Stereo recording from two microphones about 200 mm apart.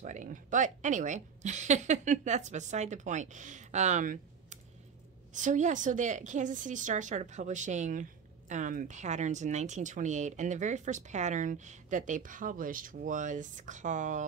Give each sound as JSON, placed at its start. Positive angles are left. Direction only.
{"t": 0.0, "sound": "a woman's voice", "side_deg": -40}